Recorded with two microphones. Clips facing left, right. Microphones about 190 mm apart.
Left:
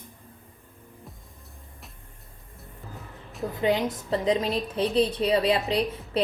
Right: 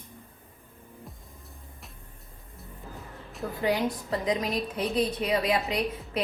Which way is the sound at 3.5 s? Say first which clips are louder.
Left 2 dB; 20° left (ahead or behind).